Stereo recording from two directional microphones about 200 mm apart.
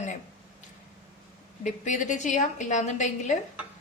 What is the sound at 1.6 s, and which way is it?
A woman's voice, 40° left (ahead or behind).